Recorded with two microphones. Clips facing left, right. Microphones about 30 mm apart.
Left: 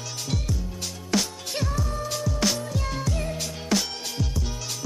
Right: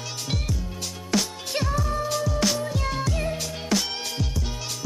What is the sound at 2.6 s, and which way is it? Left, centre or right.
Music, centre.